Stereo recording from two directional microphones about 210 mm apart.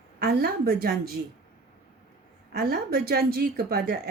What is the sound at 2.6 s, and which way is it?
A woman's voice, 45° right (ahead or behind).